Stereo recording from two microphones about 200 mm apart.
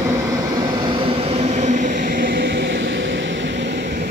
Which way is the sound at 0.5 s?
20° right (ahead or behind).